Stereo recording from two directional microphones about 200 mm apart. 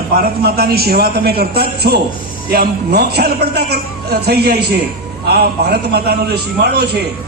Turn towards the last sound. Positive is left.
turn(degrees=-55)  # may be behind; listen again after turning